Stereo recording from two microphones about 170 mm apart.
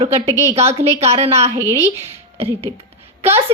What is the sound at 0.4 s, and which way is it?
Speech, 40° right (ahead or behind).